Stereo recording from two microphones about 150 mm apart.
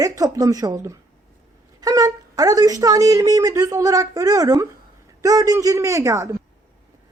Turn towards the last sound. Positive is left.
turn(degrees=-20)  # may be behind; listen again after turning